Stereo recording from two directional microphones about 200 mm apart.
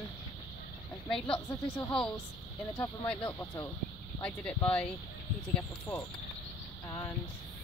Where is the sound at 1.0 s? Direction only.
5° left (ahead or behind).